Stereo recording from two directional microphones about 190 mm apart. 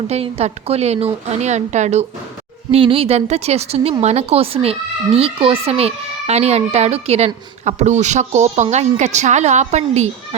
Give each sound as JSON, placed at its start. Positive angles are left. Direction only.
{"t": 0.1, "sound": "speech", "side_deg": -35}